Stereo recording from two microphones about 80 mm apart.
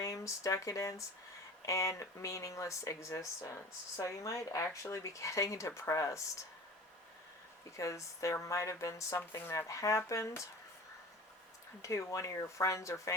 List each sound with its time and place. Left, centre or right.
0.0 s speech: left
7.8 s speech: left
11.8 s speech: left